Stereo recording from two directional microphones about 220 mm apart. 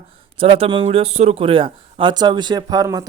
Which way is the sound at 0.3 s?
25° right (ahead or behind).